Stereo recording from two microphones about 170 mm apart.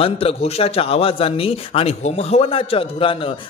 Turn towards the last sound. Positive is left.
turn(degrees=30)  # may be behind; listen again after turning